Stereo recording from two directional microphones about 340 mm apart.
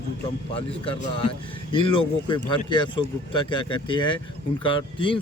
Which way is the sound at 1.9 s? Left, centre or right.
Centre.